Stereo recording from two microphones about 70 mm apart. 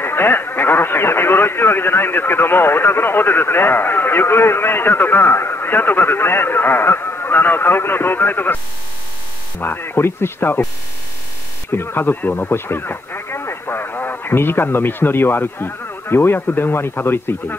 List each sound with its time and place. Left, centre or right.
0.0 s a man's voice: left
9.6 s a man's voice: left
11.7 s speech: left